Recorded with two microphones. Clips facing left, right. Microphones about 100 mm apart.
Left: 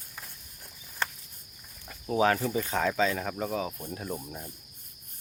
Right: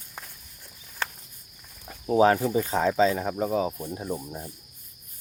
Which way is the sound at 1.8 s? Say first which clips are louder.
Right 5 dB; 30° right (ahead or behind).